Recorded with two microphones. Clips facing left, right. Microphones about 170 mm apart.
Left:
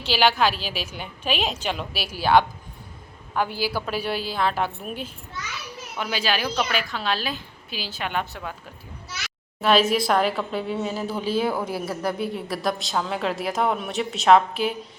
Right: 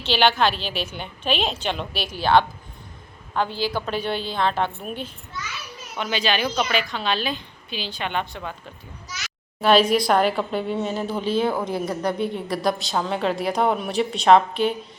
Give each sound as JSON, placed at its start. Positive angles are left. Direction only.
{"t": 0.1, "sound": "a woman's voice", "side_deg": 5}
{"t": 9.6, "sound": "a woman's voice", "side_deg": 0}